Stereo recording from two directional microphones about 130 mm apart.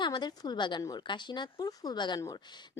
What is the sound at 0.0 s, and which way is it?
A woman's voice, 35° left (ahead or behind).